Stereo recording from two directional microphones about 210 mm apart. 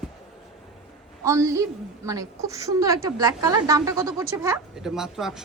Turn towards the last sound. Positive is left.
turn(degrees=0)  # may be behind; listen again after turning